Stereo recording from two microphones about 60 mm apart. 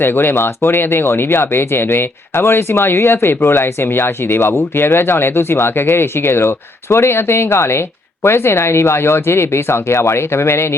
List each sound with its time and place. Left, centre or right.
0.0 s speech: left